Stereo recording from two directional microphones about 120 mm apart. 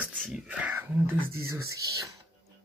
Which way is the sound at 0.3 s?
10° right (ahead or behind).